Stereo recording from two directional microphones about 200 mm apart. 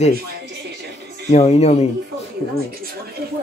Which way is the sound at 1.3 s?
35° left (ahead or behind).